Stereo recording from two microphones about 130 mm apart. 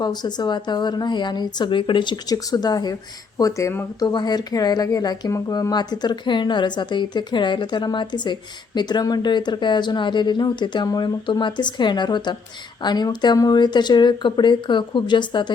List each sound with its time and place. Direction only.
0.0 s speech: 35° left (ahead or behind)
4.0 s speech: 35° left (ahead or behind)